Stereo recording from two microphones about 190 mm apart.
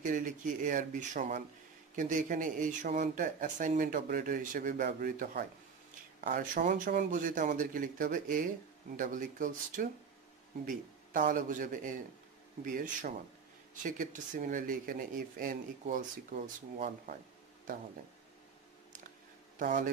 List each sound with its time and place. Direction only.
0.0 s speech: 45° right (ahead or behind)
19.6 s speech: 45° right (ahead or behind)